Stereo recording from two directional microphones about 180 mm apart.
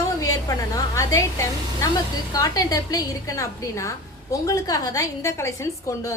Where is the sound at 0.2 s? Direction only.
20° left (ahead or behind).